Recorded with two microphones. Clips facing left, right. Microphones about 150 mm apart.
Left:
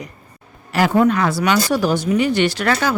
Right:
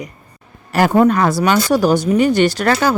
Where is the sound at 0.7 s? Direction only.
45° right (ahead or behind).